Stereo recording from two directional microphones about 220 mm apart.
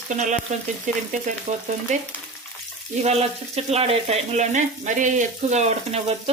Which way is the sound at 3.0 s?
30° right (ahead or behind).